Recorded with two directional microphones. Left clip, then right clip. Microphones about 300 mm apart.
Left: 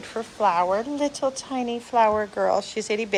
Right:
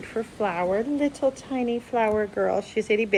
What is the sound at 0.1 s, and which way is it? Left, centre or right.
A woman's voice, centre.